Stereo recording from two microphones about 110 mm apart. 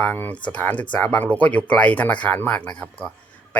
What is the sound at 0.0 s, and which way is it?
Speech, 15° left (ahead or behind).